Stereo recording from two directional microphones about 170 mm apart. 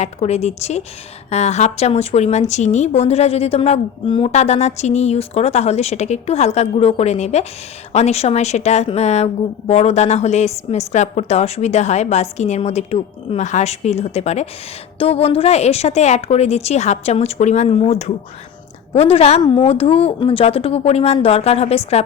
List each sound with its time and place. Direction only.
0.0 s a woman's voice: 40° left (ahead or behind)